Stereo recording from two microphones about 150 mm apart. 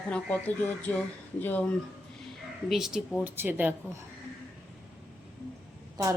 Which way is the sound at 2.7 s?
Centre (ahead or behind).